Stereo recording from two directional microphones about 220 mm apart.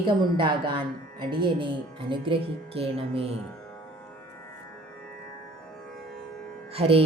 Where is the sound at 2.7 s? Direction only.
25° right (ahead or behind).